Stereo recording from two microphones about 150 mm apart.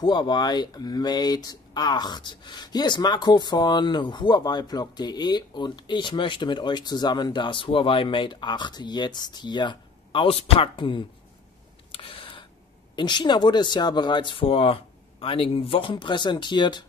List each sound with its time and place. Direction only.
0.0 s speech: 30° left (ahead or behind)
11.9 s a sound: 40° left (ahead or behind)
12.9 s speech: 30° left (ahead or behind)